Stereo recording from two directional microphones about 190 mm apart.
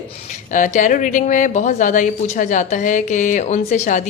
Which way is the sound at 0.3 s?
40° left (ahead or behind).